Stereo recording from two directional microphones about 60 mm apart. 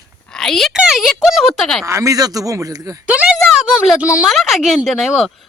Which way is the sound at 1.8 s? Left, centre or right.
Right.